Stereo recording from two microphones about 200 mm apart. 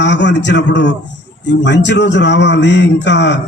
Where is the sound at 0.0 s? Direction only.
60° left (ahead or behind).